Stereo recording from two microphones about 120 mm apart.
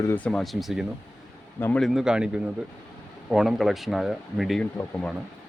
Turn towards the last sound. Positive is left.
turn(degrees=10)  # may be behind; listen again after turning